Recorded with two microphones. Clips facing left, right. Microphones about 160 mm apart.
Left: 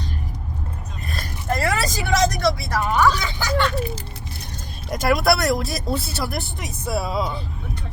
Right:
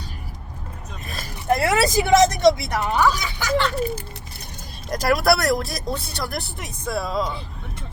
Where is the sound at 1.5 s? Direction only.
15° right (ahead or behind).